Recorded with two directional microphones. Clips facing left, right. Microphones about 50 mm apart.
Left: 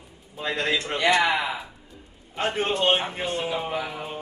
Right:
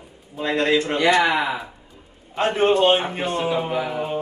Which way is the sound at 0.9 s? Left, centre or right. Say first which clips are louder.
Right 2 dB; right.